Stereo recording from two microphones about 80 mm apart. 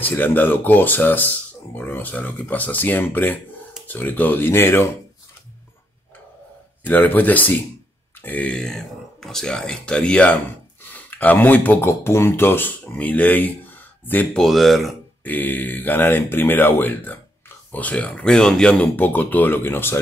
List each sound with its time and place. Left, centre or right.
0.0 s speech: left
6.9 s speech: left
8.5 s speech: centre; by 14.2 s left
14.3 s speech: centre
15.2 s speech: left
18.9 s speech: left